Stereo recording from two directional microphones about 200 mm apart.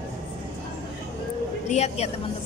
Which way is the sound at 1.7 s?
35° left (ahead or behind).